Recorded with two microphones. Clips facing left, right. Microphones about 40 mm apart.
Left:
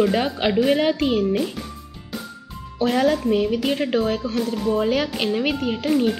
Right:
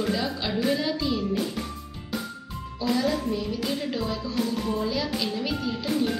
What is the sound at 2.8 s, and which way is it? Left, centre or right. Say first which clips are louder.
Speech: left 6 dB; left.